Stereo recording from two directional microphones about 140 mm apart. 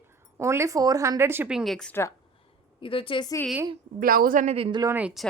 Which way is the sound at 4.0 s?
90° right.